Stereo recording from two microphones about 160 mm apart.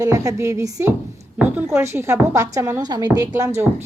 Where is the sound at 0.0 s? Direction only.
20° right (ahead or behind).